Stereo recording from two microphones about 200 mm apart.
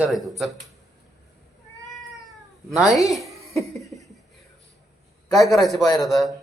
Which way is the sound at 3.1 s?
Centre (ahead or behind).